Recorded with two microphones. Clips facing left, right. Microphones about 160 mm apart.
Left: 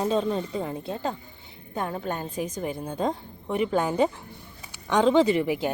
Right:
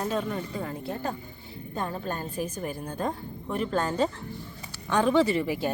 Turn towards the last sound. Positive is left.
turn(degrees=15)  # may be behind; listen again after turning